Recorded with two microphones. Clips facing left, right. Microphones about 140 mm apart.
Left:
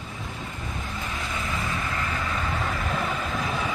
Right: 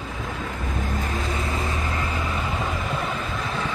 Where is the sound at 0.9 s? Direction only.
40° right (ahead or behind).